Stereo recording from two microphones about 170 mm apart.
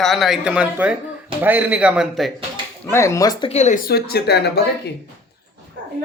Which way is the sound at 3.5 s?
45° left (ahead or behind).